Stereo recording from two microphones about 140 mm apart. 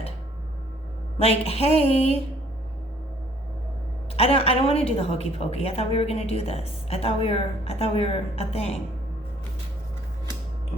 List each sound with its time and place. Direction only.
1.2 s a woman's voice: 45° left (ahead or behind)
4.2 s a woman's voice: 45° left (ahead or behind)